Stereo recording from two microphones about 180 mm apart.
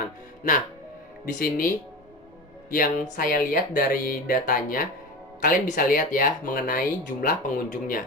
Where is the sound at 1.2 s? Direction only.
55° left (ahead or behind).